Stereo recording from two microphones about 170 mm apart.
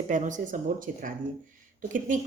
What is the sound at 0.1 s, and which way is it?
A woman's voice, 50° right (ahead or behind).